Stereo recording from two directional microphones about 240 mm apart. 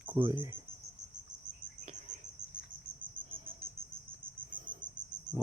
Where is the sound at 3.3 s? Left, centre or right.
Right.